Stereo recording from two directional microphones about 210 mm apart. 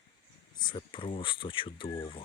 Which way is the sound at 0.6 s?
25° left (ahead or behind).